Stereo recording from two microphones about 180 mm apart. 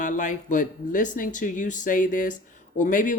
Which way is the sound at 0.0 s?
45° left (ahead or behind).